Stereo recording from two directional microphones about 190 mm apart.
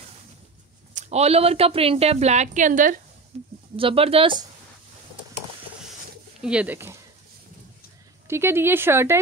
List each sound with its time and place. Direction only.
0.9 s speech: 35° right (ahead or behind)
6.4 s speech: 5° right (ahead or behind)
8.3 s speech: 10° right (ahead or behind)